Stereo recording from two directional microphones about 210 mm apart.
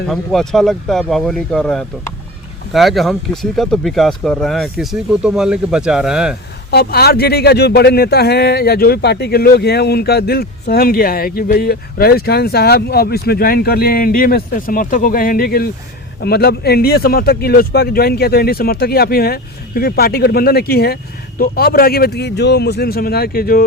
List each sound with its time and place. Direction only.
0.1 s speech: centre (ahead or behind)
6.7 s speech: 50° left (ahead or behind)